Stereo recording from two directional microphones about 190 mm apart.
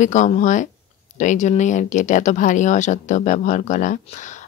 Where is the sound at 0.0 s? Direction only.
40° left (ahead or behind).